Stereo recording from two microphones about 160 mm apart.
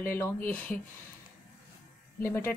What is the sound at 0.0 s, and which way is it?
Speech, 15° left (ahead or behind).